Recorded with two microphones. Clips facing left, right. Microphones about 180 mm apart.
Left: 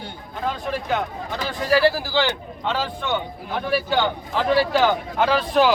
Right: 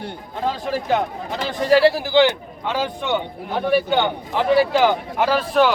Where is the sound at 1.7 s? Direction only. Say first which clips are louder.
Right 4 dB; 20° right (ahead or behind).